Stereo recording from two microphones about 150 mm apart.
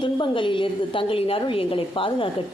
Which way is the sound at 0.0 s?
35° left (ahead or behind).